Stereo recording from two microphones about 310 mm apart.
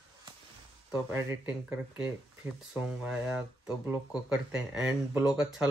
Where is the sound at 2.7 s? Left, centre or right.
Centre.